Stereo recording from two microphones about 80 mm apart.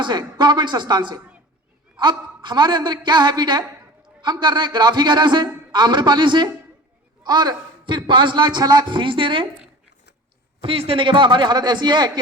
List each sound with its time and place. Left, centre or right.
0.0 s a man's voice: right
2.4 s a man's voice: right
7.2 s a man's voice: right
10.6 s a man's voice: right